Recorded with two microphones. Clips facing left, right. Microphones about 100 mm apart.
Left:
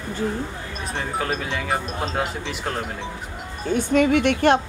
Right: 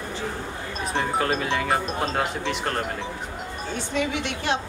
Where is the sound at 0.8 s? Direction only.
Centre (ahead or behind).